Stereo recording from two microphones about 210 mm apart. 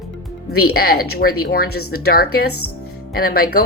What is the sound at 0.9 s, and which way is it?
Speech, 45° left (ahead or behind).